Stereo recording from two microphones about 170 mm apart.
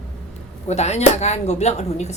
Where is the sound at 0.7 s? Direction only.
40° left (ahead or behind).